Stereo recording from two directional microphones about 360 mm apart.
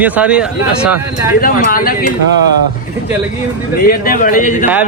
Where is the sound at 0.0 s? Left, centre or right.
Centre.